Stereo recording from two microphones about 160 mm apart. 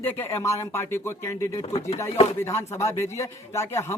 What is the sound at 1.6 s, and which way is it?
Speech, 40° left (ahead or behind).